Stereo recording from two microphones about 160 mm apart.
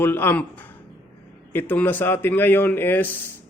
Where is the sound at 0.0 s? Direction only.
15° left (ahead or behind).